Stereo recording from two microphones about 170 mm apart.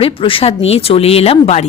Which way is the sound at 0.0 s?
30° left (ahead or behind).